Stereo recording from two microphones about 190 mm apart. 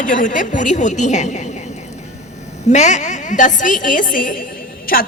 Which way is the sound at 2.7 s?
40° left (ahead or behind).